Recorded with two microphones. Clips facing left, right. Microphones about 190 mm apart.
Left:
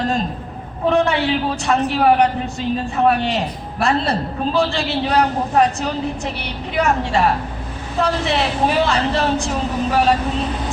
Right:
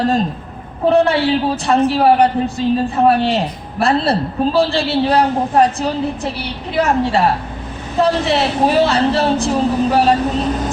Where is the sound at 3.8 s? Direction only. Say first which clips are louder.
Right 3 dB; 35° right (ahead or behind).